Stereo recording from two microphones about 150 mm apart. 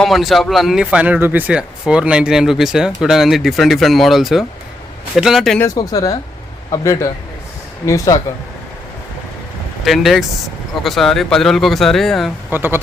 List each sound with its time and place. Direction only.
0.0 s speech: centre (ahead or behind)
5.5 s speech: 20° left (ahead or behind)
9.8 s speech: centre (ahead or behind)
12.5 s speech: 15° right (ahead or behind)